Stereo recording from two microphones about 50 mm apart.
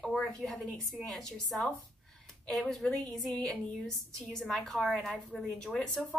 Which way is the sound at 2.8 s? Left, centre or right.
Centre.